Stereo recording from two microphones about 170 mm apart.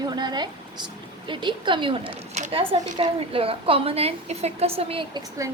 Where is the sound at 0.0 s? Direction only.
25° right (ahead or behind).